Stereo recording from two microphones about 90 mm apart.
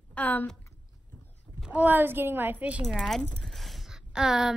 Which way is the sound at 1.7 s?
20° right (ahead or behind).